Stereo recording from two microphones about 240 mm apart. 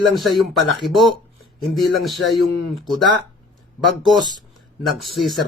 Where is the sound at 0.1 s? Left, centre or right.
Centre.